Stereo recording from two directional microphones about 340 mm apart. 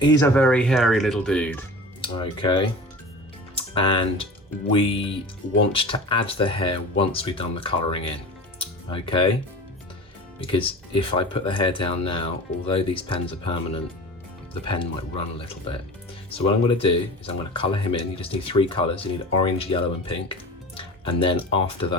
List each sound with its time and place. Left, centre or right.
0.0 s speech: centre
2.0 s speech: centre
10.4 s speech: centre